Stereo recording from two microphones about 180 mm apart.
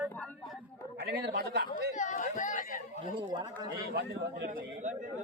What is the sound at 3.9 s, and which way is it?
Speech, 70° right (ahead or behind).